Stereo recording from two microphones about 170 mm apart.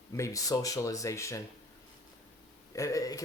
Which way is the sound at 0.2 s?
20° left (ahead or behind).